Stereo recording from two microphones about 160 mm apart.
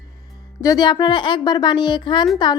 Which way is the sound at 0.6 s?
25° left (ahead or behind).